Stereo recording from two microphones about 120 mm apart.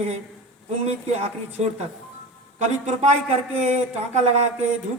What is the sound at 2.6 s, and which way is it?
Speech, 80° right.